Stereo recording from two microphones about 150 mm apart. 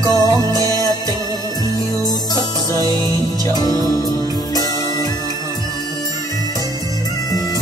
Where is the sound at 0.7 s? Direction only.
25° left (ahead or behind).